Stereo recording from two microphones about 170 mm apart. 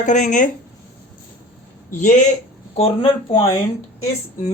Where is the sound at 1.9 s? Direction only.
45° left (ahead or behind).